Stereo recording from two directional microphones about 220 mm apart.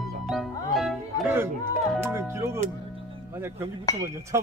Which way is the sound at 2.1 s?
10° right (ahead or behind).